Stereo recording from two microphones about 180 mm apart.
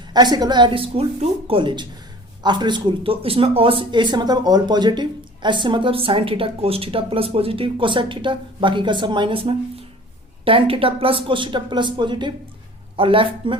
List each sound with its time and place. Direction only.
0.1 s speech: 25° right (ahead or behind)